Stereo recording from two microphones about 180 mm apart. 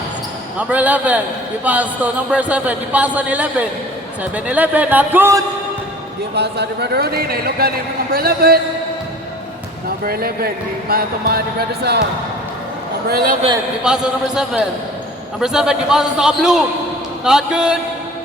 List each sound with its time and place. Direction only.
0.6 s a man's voice: 10° right (ahead or behind)
6.3 s speech: 70° right (ahead or behind)
10.0 s speech: 55° right (ahead or behind)
13.1 s speech: 60° right (ahead or behind)
13.8 s speech: 5° right (ahead or behind)